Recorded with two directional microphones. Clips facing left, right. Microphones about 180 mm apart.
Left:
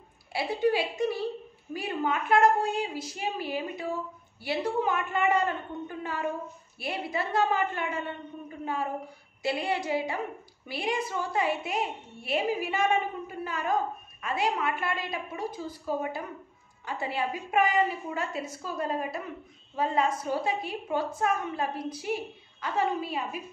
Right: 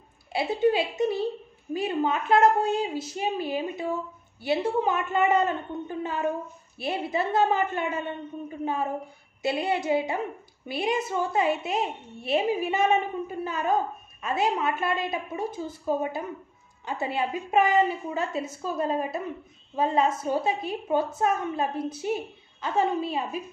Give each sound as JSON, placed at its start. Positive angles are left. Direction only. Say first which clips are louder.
{"t": 0.3, "sound": "a woman's voice", "louder": "right 3 dB", "side_deg": -25}